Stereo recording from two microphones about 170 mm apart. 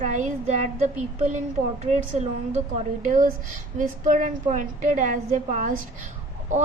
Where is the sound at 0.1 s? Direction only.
45° right (ahead or behind).